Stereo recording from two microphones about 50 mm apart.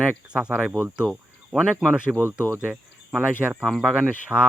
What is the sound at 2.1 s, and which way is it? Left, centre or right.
Speech, right.